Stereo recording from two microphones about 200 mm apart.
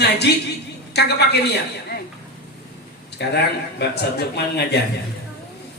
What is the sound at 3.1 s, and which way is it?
A man's voice, 55° left (ahead or behind).